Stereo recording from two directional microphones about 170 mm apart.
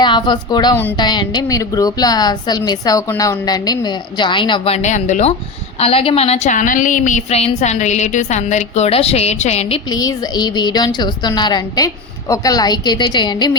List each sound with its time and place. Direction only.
0.0 s a woman's voice: 25° left (ahead or behind)
9.9 s a woman's voice: 20° left (ahead or behind)